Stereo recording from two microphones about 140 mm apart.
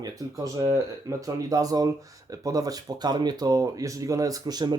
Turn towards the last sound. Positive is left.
turn(degrees=-30)  # may be behind; listen again after turning